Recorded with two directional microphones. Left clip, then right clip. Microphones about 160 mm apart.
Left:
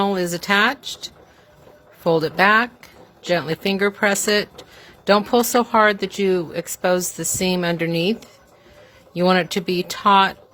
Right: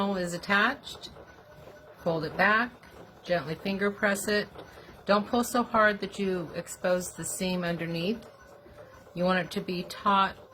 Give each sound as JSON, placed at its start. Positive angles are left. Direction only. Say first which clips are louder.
{"t": 0.0, "sound": "speech", "louder": "left 10 dB", "side_deg": 90}
{"t": 9.1, "sound": "speech", "louder": "left 10 dB", "side_deg": 90}